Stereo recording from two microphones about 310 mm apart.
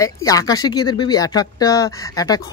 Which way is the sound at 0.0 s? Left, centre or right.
Centre.